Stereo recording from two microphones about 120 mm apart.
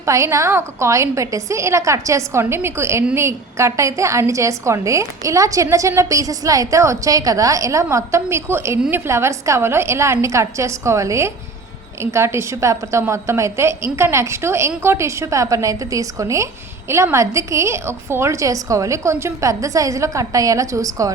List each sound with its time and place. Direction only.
0.0 s a woman's voice: 25° right (ahead or behind)